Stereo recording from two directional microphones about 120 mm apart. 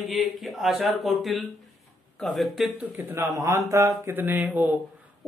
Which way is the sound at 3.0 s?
15° right (ahead or behind).